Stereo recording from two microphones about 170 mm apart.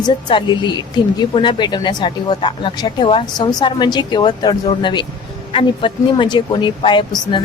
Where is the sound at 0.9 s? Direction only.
25° left (ahead or behind).